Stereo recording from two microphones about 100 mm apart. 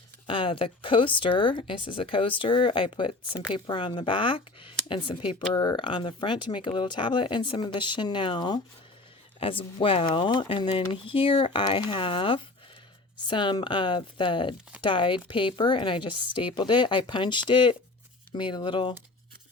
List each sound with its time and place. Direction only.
0.3 s speech: 60° left (ahead or behind)
9.4 s speech: 60° left (ahead or behind); by 10.7 s 45° left (ahead or behind)
10.7 s speech: 65° left (ahead or behind)